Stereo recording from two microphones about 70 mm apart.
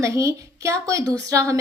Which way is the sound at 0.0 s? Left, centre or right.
Right.